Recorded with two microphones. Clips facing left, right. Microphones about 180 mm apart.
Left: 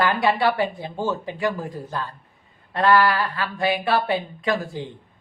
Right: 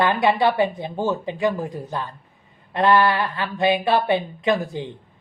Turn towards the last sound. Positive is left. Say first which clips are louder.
# right 3 dB
turn(degrees=-20)  # may be behind; listen again after turning